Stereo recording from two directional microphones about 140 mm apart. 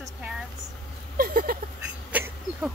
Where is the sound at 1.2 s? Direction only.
90° right.